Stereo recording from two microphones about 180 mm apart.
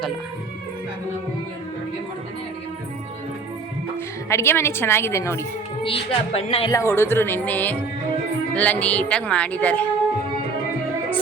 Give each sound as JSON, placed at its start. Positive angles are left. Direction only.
{"t": 4.3, "sound": "a woman's voice", "side_deg": 15}
{"t": 5.8, "sound": "a woman's voice", "side_deg": 35}
{"t": 6.7, "sound": "a woman's voice", "side_deg": 15}